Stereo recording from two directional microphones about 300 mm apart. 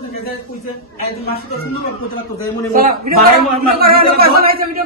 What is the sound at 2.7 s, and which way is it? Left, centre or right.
A man's voice, right.